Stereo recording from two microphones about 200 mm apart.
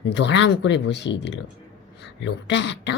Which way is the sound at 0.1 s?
60° left (ahead or behind).